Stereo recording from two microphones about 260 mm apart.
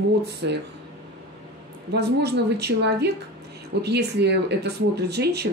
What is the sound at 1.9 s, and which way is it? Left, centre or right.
Speech, right.